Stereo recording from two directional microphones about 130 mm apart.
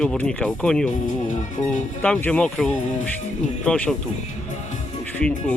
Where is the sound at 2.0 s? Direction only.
10° left (ahead or behind).